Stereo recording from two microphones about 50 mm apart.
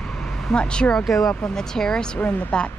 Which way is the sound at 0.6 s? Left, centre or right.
Centre.